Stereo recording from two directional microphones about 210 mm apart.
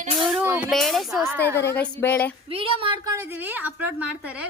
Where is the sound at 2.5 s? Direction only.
25° right (ahead or behind).